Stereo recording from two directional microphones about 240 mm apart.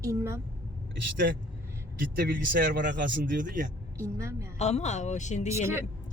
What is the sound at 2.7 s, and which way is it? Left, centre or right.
Speech, right.